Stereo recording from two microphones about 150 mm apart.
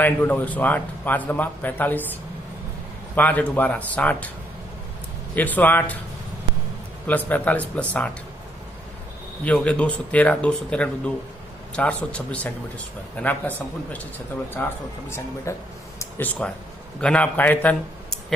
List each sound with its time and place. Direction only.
0.0 s a man's voice: 10° left (ahead or behind)
3.2 s a man's voice: 10° left (ahead or behind)
5.3 s a man's voice: 10° left (ahead or behind)
7.1 s a man's voice: 10° left (ahead or behind)
9.4 s a man's voice: 10° left (ahead or behind)